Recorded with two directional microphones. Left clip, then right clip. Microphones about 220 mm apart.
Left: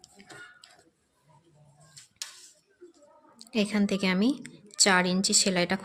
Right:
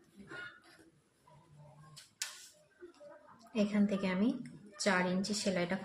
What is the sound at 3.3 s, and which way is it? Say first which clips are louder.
A woman's voice: left 6 dB; 50° left (ahead or behind).